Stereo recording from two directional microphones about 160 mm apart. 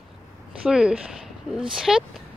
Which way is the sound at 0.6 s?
5° right (ahead or behind).